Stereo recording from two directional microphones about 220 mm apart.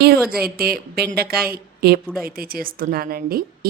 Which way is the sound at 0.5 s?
45° right (ahead or behind).